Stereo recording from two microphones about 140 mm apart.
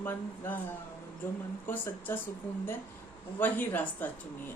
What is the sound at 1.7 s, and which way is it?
Speech, 15° left (ahead or behind).